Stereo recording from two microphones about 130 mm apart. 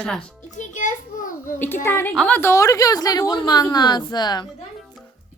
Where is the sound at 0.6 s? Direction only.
75° left (ahead or behind).